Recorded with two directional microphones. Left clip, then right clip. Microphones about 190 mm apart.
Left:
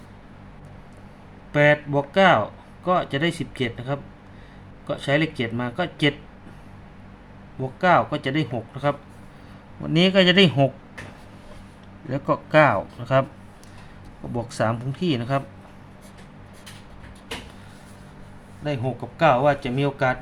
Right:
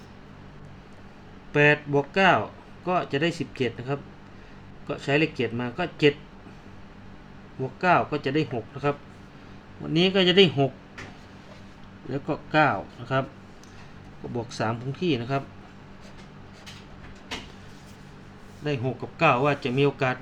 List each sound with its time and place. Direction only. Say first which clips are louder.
1.5 s speech: left 2 dB; 20° left (ahead or behind)
7.8 s speech: left 3 dB; 25° left (ahead or behind)
10.1 s speech: left 2 dB; 35° left (ahead or behind)
12.1 s speech: left 6 dB; 40° left (ahead or behind)
14.3 s speech: left 5 dB; 30° left (ahead or behind)
18.6 s speech: left 2 dB; 10° left (ahead or behind)